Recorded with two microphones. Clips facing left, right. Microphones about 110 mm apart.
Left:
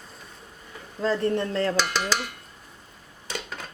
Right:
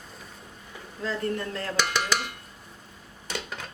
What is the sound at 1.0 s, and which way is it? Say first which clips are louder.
Speech: left 6 dB; 30° left (ahead or behind).